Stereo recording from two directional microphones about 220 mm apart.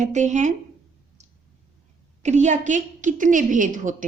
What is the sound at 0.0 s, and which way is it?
Speech, 35° right (ahead or behind).